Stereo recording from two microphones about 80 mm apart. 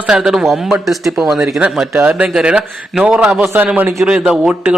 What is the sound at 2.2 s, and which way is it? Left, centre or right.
A man's voice, centre.